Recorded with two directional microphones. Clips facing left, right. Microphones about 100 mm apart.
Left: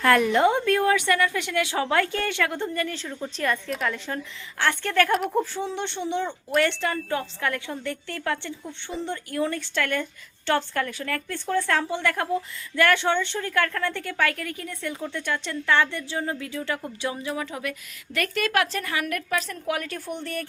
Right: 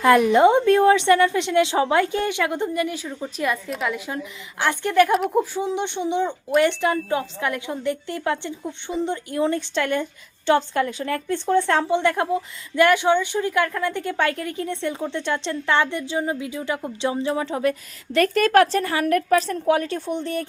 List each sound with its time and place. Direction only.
0.0 s a woman's voice: 20° right (ahead or behind)